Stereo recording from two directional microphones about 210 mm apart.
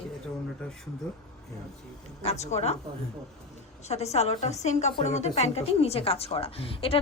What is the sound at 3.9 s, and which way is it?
A woman's voice, 30° left (ahead or behind).